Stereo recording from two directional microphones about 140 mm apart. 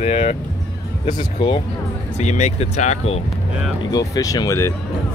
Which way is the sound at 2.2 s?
55° left (ahead or behind).